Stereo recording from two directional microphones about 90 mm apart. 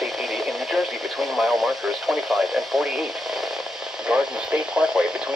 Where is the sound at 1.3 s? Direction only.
Centre (ahead or behind).